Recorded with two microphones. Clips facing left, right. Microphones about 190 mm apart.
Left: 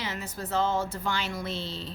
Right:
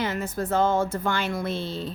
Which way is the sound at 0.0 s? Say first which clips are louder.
Right 8 dB; 50° right (ahead or behind).